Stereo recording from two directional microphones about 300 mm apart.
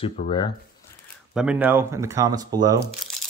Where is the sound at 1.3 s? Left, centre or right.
Centre.